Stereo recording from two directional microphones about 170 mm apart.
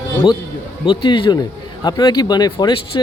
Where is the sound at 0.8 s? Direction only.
30° left (ahead or behind).